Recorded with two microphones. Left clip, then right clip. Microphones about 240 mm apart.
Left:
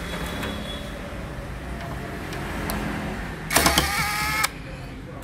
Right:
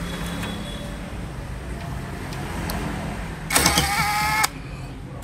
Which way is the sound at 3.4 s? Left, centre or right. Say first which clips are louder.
Even; right.